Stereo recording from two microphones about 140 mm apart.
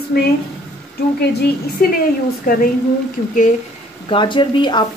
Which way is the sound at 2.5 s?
75° left (ahead or behind).